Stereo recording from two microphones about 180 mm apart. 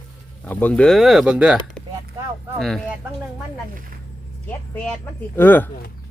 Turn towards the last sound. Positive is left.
turn(degrees=10)  # may be behind; listen again after turning